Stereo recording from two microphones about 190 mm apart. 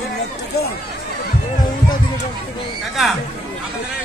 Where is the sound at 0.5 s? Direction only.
55° left (ahead or behind).